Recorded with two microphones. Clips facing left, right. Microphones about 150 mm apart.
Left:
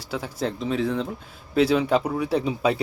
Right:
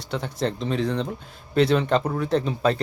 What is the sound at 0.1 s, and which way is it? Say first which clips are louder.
Speech: right 1 dB; 5° left (ahead or behind).